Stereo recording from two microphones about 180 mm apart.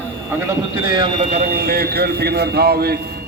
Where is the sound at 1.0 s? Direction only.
40° right (ahead or behind).